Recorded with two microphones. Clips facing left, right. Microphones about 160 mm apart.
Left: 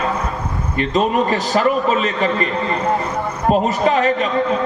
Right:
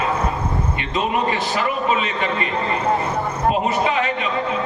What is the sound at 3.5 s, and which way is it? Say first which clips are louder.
Speech: left 4 dB; 40° left (ahead or behind).